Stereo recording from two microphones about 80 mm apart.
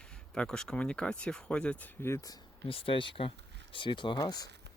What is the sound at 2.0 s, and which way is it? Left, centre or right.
Speech, left.